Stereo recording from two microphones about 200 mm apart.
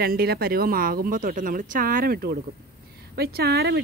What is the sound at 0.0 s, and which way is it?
A woman's voice, 50° right (ahead or behind).